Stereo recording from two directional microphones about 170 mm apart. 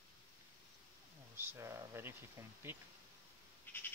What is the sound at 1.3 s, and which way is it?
Speech, 15° right (ahead or behind).